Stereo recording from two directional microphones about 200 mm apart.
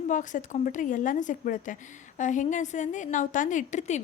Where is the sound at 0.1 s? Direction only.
40° left (ahead or behind).